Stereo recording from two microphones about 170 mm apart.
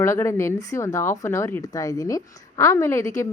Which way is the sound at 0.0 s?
15° left (ahead or behind).